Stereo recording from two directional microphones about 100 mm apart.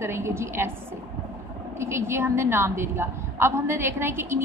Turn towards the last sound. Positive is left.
turn(degrees=-25)  # may be behind; listen again after turning